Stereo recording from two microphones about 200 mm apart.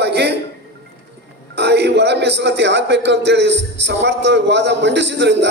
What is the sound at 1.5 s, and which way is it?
A man's voice, 55° right (ahead or behind).